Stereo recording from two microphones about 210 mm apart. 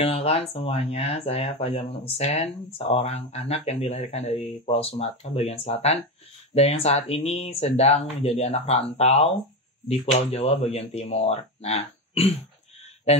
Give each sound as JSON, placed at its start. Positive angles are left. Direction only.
{"t": 0.0, "sound": "speech", "side_deg": 30}